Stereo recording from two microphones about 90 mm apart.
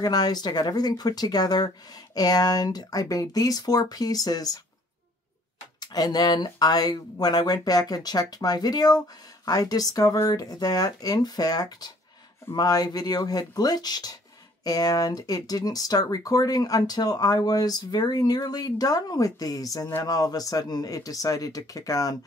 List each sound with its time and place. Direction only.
0.0 s speech: 50° left (ahead or behind)
5.8 s speech: 50° left (ahead or behind)